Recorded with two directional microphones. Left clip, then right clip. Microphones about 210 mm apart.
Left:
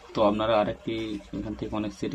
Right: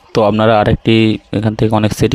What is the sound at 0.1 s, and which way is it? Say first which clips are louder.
Speech: right 12 dB; 50° right (ahead or behind).